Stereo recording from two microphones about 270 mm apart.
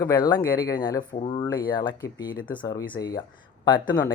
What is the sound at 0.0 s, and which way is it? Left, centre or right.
Speech, centre.